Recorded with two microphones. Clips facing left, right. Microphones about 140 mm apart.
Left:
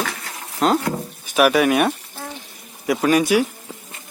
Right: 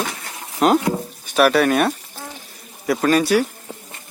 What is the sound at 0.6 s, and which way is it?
Speech, 5° right (ahead or behind).